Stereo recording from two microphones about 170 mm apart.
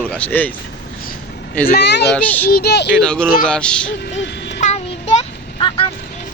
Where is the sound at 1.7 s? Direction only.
80° left.